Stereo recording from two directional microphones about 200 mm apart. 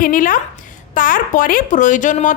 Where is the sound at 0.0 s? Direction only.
45° left (ahead or behind).